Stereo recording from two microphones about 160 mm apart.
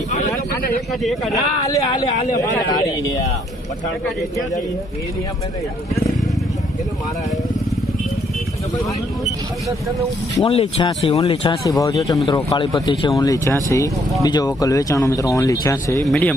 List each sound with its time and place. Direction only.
0.1 s a sound: 50° left (ahead or behind)
1.0 s speech: centre (ahead or behind)
2.4 s speech: 20° left (ahead or behind)
10.4 s speech: 35° left (ahead or behind)
11.6 s speech: 20° left (ahead or behind)
16.0 s speech: 5° left (ahead or behind)